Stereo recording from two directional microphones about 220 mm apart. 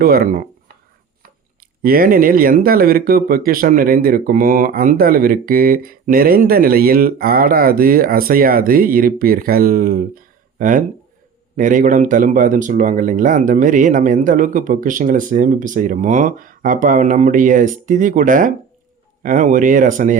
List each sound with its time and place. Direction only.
0.0 s speech: 45° right (ahead or behind)
1.8 s speech: 40° right (ahead or behind)